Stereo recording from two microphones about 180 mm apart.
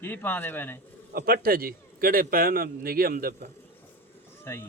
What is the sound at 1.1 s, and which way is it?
A man's voice, 55° right (ahead or behind).